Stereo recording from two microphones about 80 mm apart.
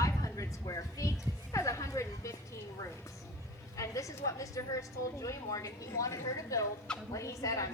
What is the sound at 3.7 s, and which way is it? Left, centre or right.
A woman's voice, left.